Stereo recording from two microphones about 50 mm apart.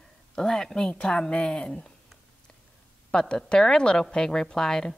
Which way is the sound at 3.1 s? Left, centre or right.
Centre.